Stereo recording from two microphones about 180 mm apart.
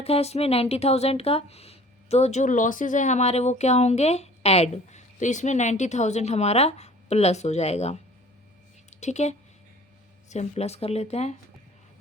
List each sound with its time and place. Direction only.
0.0 s a woman's voice: 35° left (ahead or behind)